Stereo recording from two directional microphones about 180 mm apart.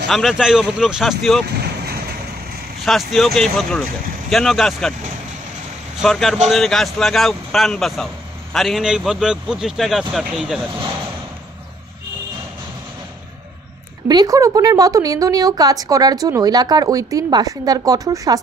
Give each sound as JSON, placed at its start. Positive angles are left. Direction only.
{"t": 0.1, "sound": "speech", "side_deg": 0}
{"t": 2.8, "sound": "speech", "side_deg": 0}
{"t": 5.9, "sound": "speech", "side_deg": 0}
{"t": 14.0, "sound": "speech", "side_deg": -20}